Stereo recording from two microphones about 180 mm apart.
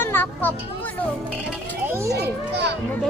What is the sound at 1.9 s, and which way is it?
Speech, 15° right (ahead or behind).